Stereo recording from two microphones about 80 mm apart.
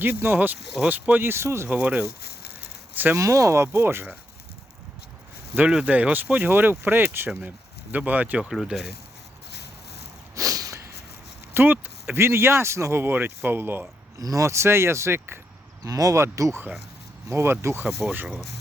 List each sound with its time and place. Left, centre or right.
0.0 s speech: right
1.7 s speech: centre
3.2 s speech: right
5.5 s speech: centre
8.4 s speech: centre
10.3 s a sound: right
11.5 s speech: right
14.2 s speech: right
15.8 s speech: right